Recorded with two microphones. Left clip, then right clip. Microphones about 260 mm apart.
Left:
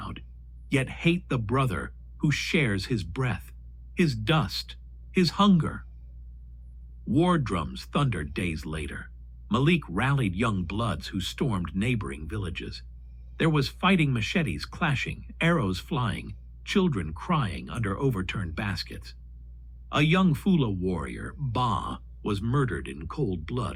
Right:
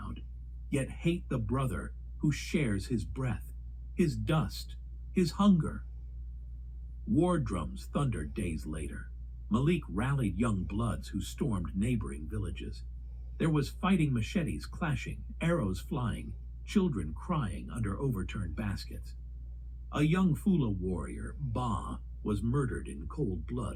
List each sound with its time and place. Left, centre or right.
0.7 s speech: left
7.1 s speech: left